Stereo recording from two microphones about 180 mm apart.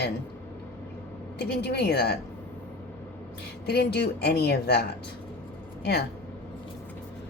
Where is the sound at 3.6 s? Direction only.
65° left (ahead or behind).